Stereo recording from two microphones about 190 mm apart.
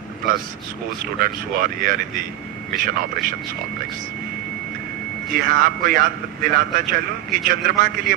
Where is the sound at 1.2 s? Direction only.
50° right (ahead or behind).